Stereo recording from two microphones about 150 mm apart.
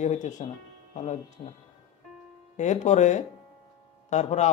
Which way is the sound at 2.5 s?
50° left (ahead or behind).